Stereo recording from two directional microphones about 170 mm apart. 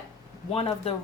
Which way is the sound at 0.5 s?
35° left (ahead or behind).